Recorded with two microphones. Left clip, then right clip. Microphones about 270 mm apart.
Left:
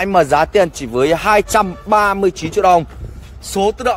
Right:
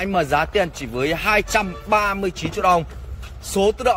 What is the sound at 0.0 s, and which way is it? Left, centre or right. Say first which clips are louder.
Speech: left 7 dB; centre.